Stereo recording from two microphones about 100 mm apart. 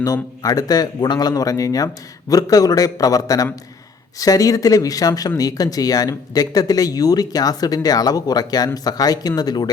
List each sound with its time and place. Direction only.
0.0 s speech: 35° left (ahead or behind)